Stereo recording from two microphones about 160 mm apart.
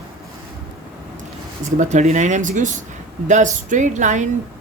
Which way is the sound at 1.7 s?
45° right (ahead or behind).